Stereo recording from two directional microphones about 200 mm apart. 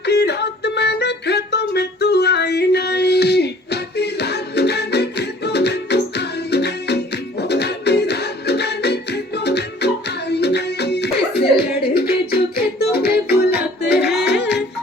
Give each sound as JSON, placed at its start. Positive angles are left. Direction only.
{"t": 0.0, "sound": "music", "side_deg": 55}